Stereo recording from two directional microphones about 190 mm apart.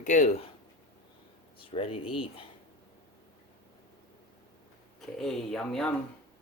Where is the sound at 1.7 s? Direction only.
30° left (ahead or behind).